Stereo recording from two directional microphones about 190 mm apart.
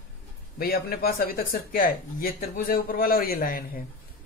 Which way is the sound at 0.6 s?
55° left (ahead or behind).